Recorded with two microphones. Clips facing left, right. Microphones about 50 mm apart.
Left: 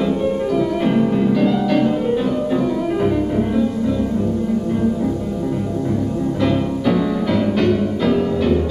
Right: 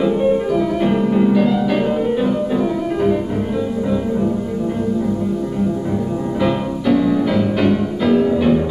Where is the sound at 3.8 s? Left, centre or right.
Centre.